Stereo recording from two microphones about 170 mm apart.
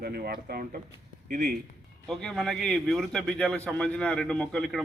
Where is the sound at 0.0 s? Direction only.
65° right (ahead or behind).